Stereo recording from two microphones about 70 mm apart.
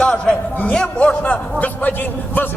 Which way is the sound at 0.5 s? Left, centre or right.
Left.